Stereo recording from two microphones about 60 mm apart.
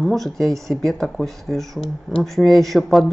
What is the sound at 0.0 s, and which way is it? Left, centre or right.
Speech, centre.